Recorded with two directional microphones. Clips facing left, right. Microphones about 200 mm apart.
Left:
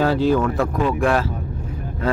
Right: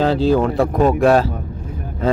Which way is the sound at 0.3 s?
35° right (ahead or behind).